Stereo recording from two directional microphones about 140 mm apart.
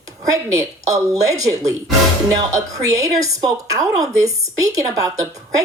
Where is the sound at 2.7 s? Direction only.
25° right (ahead or behind).